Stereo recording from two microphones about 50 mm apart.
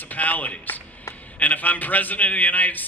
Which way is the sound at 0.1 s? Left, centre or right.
Left.